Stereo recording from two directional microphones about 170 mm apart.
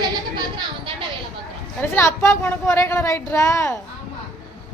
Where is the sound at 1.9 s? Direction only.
15° left (ahead or behind).